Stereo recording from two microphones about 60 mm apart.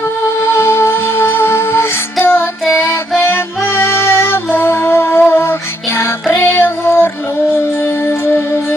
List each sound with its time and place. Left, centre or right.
0.5 s music: left
6.3 s child singing: left